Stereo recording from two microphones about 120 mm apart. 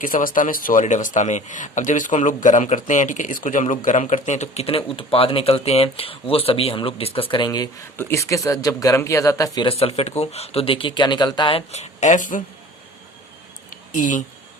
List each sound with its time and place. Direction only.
0.0 s a man's voice: 90° left; by 7.7 s 35° left (ahead or behind)
7.9 s a man's voice: 20° left (ahead or behind)
9.6 s speech: 55° left (ahead or behind)
11.7 s a man's voice: 70° left (ahead or behind); by 12.4 s 90° left
13.9 s speech: 90° left